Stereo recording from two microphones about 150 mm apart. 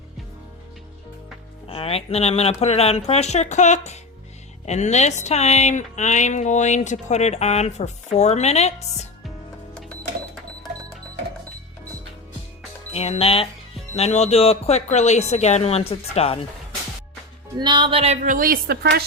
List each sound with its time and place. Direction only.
1.6 s speech: 40° left (ahead or behind)
9.7 s cash register: 5° left (ahead or behind)
12.9 s speech: 40° left (ahead or behind)
17.6 s speech: 30° right (ahead or behind)
18.2 s a woman's voice: 65° right (ahead or behind); by 19.0 s 90° right